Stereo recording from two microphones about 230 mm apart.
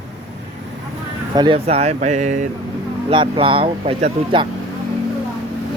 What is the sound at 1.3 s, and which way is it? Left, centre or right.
Speech, right.